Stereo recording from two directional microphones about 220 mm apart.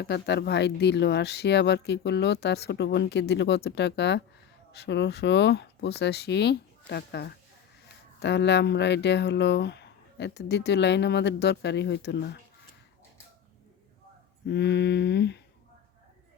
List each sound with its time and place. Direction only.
0.0 s speech: 50° left (ahead or behind)
14.4 s speech: 50° left (ahead or behind)